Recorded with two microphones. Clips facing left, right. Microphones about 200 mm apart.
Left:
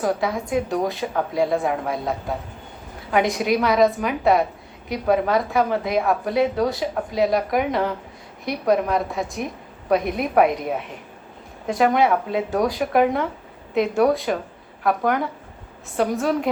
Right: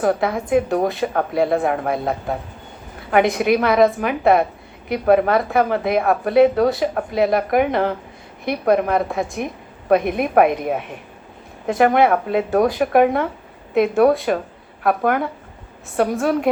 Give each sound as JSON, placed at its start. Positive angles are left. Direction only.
{"t": 0.0, "sound": "a woman's voice", "side_deg": -55}